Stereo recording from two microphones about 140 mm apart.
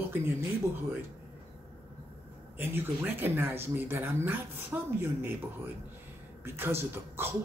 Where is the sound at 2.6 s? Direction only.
15° right (ahead or behind).